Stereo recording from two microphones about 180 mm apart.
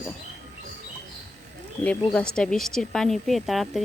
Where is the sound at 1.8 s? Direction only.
5° left (ahead or behind).